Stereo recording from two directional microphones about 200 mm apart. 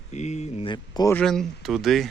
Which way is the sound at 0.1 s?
35° left (ahead or behind).